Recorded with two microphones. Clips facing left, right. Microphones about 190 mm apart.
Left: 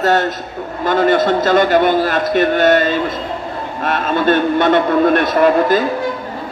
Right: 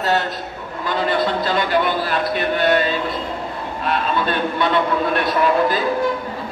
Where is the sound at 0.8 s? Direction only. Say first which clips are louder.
Left 7 dB; 45° left (ahead or behind).